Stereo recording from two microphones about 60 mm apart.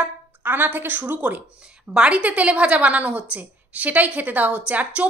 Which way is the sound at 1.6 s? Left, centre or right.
Centre.